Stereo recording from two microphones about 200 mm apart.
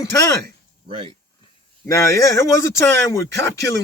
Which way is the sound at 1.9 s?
15° left (ahead or behind).